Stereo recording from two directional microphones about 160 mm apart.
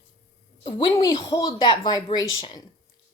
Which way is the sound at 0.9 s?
25° left (ahead or behind).